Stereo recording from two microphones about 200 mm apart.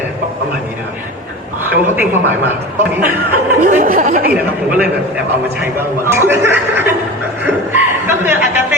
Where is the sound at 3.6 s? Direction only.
40° right (ahead or behind).